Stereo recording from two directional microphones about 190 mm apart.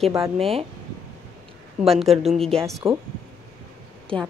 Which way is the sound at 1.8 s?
Centre (ahead or behind).